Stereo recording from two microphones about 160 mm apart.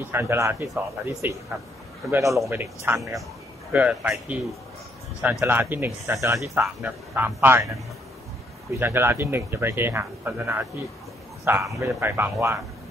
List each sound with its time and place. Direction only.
0.0 s a man's voice: 15° right (ahead or behind)